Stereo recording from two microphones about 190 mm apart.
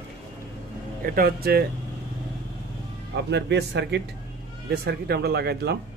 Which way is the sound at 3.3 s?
65° right (ahead or behind).